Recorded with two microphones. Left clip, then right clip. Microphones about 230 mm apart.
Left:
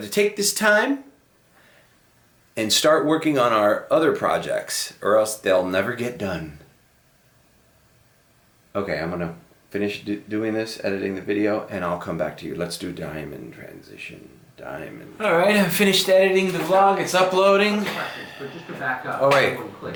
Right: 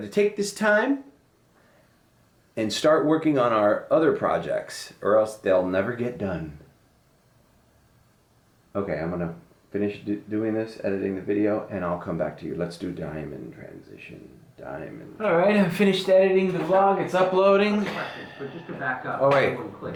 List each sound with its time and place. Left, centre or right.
0.0 s speech: centre
2.6 s speech: centre
8.7 s speech: centre